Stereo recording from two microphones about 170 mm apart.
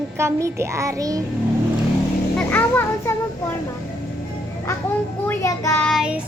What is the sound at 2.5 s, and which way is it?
Music, 10° left (ahead or behind).